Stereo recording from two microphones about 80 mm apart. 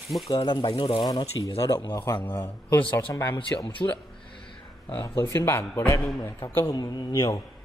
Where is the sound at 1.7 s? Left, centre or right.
Left.